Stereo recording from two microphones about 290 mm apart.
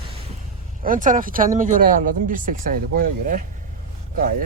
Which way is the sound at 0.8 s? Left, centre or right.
Right.